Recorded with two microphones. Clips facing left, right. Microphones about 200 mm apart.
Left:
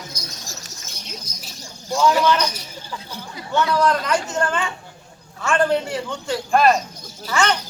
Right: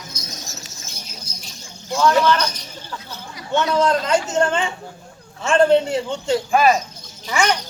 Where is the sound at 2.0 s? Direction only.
10° left (ahead or behind).